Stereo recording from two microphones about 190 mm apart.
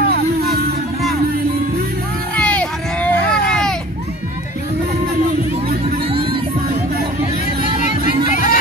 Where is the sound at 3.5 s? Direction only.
5° left (ahead or behind).